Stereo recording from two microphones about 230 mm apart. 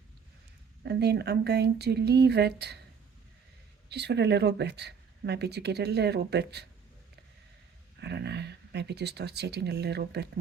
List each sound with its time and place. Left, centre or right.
0.9 s speech: right
3.8 s speech: right
8.0 s speech: right